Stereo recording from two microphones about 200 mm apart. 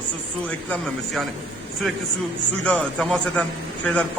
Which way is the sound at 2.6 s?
5° left (ahead or behind).